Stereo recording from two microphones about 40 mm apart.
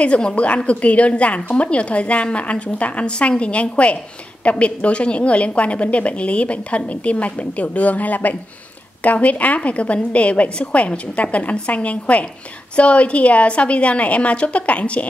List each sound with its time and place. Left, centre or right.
0.0 s a woman's voice: left